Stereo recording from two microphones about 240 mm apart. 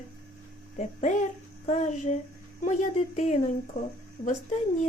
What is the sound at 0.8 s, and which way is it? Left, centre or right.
A woman's voice, left.